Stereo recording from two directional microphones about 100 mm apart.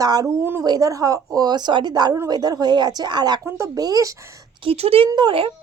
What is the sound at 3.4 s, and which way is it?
Speech, 30° right (ahead or behind).